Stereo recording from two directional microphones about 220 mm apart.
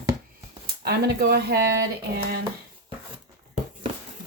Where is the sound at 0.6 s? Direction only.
45° right (ahead or behind).